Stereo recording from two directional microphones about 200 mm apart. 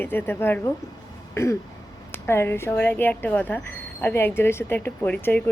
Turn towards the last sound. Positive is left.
turn(degrees=10)  # may be behind; listen again after turning